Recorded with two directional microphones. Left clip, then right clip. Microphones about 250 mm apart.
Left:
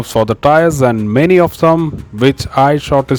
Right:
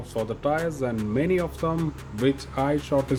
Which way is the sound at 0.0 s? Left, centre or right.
Left.